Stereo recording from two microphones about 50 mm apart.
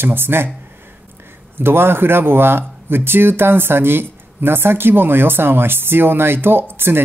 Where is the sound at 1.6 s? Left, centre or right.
Right.